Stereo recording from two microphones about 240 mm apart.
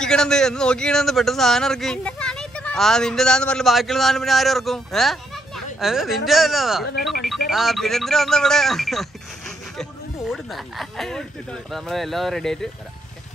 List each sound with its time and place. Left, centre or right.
0.0 s speech: centre